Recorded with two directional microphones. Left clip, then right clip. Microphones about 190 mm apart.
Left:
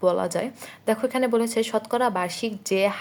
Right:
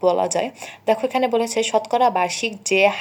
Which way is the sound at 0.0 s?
30° left (ahead or behind).